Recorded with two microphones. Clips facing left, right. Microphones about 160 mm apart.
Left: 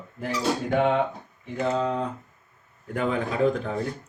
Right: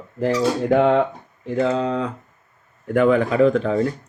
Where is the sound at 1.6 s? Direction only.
90° right.